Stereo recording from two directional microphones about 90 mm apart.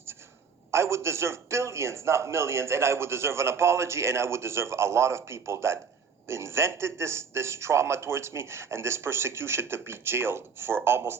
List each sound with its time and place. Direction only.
0.7 s a man's voice: 30° right (ahead or behind)